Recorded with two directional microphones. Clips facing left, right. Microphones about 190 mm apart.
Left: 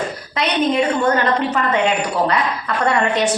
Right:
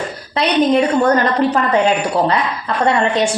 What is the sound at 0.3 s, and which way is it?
A woman's voice, 40° right (ahead or behind).